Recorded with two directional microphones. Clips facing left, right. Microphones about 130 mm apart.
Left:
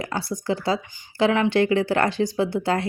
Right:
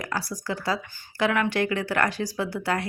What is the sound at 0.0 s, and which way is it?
Speech, 25° left (ahead or behind).